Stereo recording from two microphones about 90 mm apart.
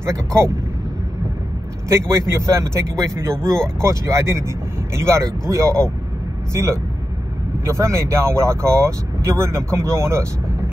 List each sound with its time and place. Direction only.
0.0 s speech: 30° right (ahead or behind)
1.9 s speech: 30° right (ahead or behind)